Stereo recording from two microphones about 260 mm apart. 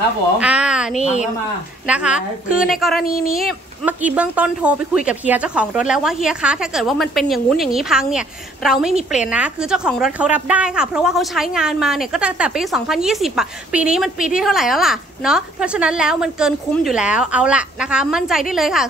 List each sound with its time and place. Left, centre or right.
0.4 s a woman's voice: centre
0.9 s a woman's voice: left
1.9 s a woman's voice: centre